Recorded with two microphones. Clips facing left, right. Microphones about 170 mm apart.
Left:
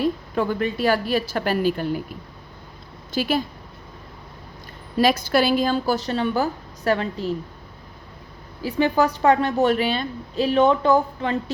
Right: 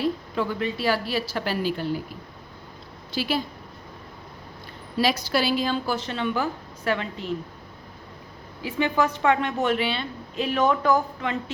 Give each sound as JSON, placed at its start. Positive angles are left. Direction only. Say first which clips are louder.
{"t": 0.0, "sound": "a woman's voice", "louder": "left 3 dB", "side_deg": 50}
{"t": 3.1, "sound": "a woman's voice", "louder": "left 4 dB", "side_deg": 50}
{"t": 4.9, "sound": "a woman's voice", "louder": "left 5 dB", "side_deg": 50}
{"t": 8.6, "sound": "a woman's voice", "louder": "left 4 dB", "side_deg": 35}